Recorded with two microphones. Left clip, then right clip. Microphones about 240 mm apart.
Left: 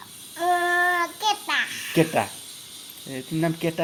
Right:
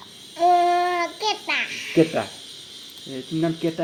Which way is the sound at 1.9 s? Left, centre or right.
Left.